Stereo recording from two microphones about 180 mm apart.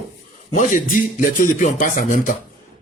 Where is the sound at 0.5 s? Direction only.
45° left (ahead or behind).